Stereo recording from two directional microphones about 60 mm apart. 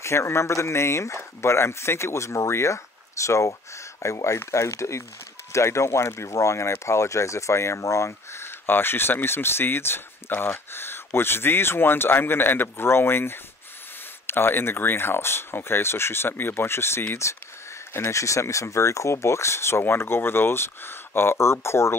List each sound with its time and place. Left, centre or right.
0.0 s speech: left